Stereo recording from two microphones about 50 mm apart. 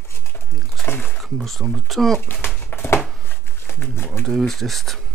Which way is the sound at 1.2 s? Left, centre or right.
Centre.